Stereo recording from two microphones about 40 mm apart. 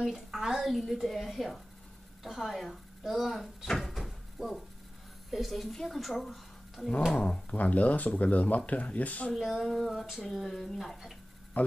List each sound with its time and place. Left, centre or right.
0.0 s speech: centre
3.8 s door: centre
5.3 s speech: centre
7.5 s speech: left
9.3 s speech: centre
11.6 s speech: left